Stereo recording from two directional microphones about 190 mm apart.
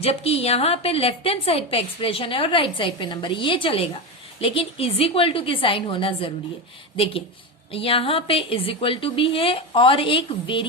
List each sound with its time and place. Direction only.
0.0 s a woman's voice: 30° left (ahead or behind)